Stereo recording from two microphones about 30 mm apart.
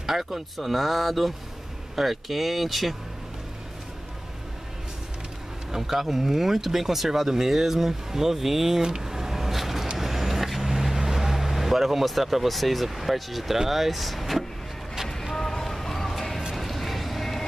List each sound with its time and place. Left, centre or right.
0.0 s speech: centre
5.7 s speech: centre
8.8 s a sound: centre
9.9 s vehicle: centre
13.7 s speech: centre
15.3 s music: centre
16.5 s vehicle: centre